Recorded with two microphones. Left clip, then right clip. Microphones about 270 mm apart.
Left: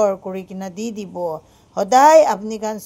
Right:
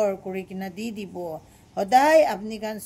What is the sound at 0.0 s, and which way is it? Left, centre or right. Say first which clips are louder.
A woman's voice: left 6 dB; centre.